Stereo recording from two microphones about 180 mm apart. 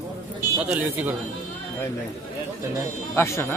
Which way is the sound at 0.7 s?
10° right (ahead or behind).